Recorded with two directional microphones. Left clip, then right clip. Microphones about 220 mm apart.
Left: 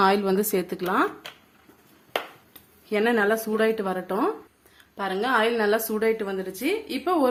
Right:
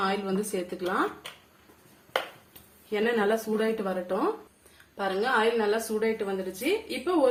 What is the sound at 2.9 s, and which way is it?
A woman's voice, 45° left (ahead or behind).